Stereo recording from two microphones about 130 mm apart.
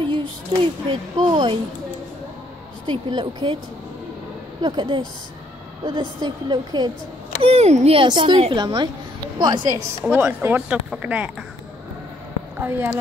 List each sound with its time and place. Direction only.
0.0 s a sound: 40° right (ahead or behind)
0.6 s a woman's voice: 40° right (ahead or behind)
2.9 s a woman's voice: 40° right (ahead or behind)
4.6 s a woman's voice: 35° right (ahead or behind)
7.4 s a woman's voice: 55° right (ahead or behind); by 9.8 s 30° right (ahead or behind)
10.4 s speech: 10° right (ahead or behind)
12.5 s speech: 15° right (ahead or behind)